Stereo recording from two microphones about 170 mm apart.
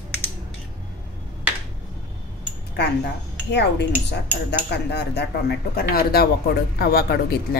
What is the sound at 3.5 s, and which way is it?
Speech, 90° left.